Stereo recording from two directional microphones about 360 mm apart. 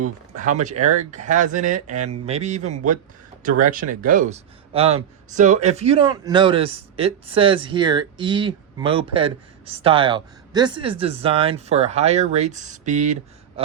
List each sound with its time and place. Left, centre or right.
0.0 s speech: right